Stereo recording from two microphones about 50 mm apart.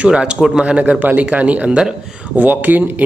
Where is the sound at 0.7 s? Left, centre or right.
Right.